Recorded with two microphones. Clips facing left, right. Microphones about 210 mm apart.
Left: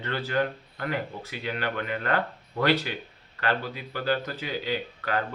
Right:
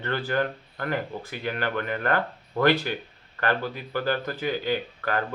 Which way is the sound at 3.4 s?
50° right (ahead or behind).